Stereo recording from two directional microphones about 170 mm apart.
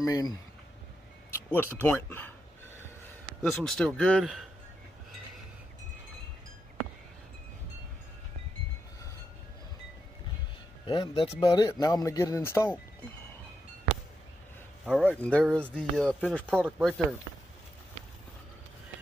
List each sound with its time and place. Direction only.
0.0 s speech: 20° left (ahead or behind)
1.3 s speech: 15° left (ahead or behind)
3.4 s a man's voice: centre (ahead or behind)
10.9 s speech: 30° left (ahead or behind); by 12.7 s 15° left (ahead or behind)
14.9 s speech: 5° right (ahead or behind)
15.1 s a man's voice: 5° left (ahead or behind)